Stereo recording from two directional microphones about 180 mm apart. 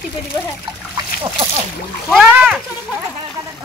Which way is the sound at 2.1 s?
5° right (ahead or behind).